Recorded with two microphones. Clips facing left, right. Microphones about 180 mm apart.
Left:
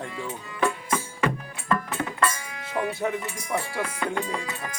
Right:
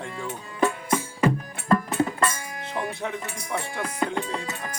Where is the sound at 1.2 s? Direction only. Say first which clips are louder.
Right 4 dB; 35° right (ahead or behind).